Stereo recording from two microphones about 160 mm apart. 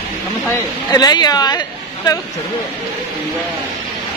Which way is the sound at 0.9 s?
25° left (ahead or behind).